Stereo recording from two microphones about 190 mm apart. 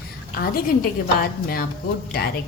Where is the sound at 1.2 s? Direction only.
50° left (ahead or behind).